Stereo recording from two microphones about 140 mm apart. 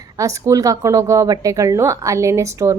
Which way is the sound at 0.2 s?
25° right (ahead or behind).